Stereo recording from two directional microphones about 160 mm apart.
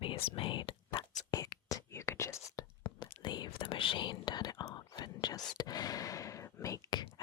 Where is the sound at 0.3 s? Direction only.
35° left (ahead or behind); by 2.6 s 20° left (ahead or behind).